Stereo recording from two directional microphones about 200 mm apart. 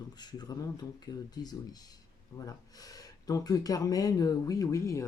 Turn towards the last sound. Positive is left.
turn(degrees=15)  # may be behind; listen again after turning